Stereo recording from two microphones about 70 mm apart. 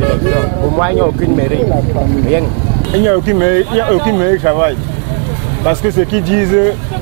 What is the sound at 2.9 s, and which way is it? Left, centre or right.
Speech, right.